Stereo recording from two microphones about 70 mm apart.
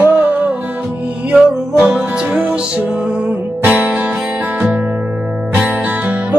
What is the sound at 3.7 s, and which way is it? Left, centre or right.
Music, right.